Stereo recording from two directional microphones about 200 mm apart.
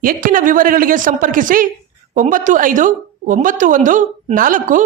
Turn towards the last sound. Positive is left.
turn(degrees=-40)  # may be behind; listen again after turning